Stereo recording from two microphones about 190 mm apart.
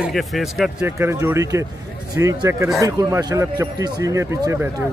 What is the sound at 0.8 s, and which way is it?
A man's voice, 10° right (ahead or behind).